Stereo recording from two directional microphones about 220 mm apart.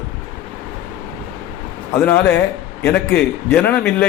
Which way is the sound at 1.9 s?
10° left (ahead or behind).